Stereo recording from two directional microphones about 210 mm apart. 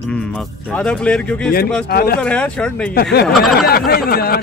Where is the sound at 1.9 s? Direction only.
45° left (ahead or behind).